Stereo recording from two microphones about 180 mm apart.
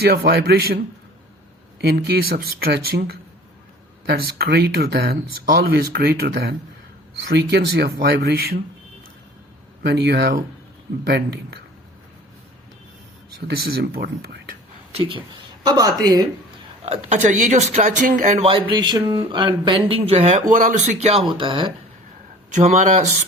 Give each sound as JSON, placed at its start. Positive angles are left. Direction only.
{"t": 0.0, "sound": "speech", "side_deg": -60}
{"t": 1.8, "sound": "speech", "side_deg": -65}
{"t": 9.8, "sound": "speech", "side_deg": -70}
{"t": 13.7, "sound": "speech", "side_deg": -60}
{"t": 15.6, "sound": "speech", "side_deg": -20}
{"t": 16.8, "sound": "speech", "side_deg": -35}
{"t": 20.5, "sound": "speech", "side_deg": -50}
{"t": 21.3, "sound": "speech", "side_deg": -30}
{"t": 22.5, "sound": "speech", "side_deg": -40}